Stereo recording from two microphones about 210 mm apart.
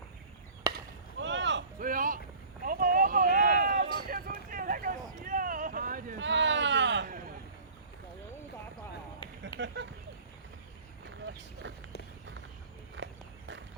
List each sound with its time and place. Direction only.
0.7 s chop: 15° right (ahead or behind)
1.2 s a sound: 60° right (ahead or behind)
1.8 s boat: 40° right (ahead or behind)
2.6 s a sound: 40° right (ahead or behind)
4.4 s boat: 40° right (ahead or behind)
6.1 s a sound: 60° right (ahead or behind)
9.6 s speech: 55° right (ahead or behind)
11.6 s speech: 60° right (ahead or behind)
13.0 s walk: 60° right (ahead or behind)